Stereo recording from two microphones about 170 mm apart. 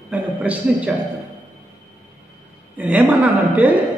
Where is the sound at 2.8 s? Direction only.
10° right (ahead or behind).